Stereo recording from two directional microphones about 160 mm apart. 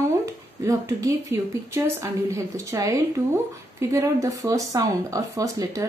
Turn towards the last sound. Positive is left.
turn(degrees=-20)  # may be behind; listen again after turning